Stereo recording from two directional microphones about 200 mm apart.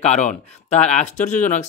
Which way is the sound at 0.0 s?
35° left (ahead or behind).